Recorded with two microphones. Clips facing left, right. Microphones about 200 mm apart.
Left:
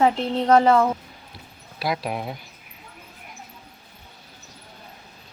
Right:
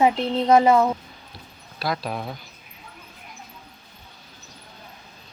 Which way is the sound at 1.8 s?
15° left (ahead or behind).